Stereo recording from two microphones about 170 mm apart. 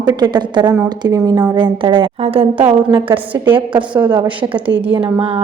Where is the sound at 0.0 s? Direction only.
25° right (ahead or behind).